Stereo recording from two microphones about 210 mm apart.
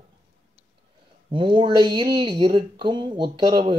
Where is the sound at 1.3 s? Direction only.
25° right (ahead or behind).